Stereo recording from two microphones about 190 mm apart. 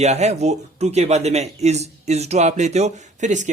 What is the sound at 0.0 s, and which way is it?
Speech, 35° right (ahead or behind).